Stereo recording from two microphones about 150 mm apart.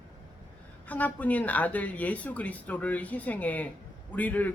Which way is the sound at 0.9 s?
10° left (ahead or behind).